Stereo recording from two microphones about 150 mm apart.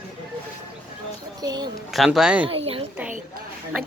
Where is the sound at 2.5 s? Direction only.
40° right (ahead or behind).